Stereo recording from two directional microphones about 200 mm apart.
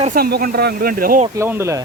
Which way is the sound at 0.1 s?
50° right (ahead or behind).